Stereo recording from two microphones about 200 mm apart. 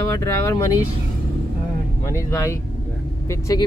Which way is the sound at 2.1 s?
15° left (ahead or behind).